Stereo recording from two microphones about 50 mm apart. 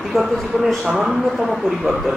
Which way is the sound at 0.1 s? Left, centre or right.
Centre.